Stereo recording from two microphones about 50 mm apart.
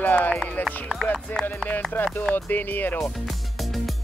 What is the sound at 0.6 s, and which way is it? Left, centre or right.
Speech, centre.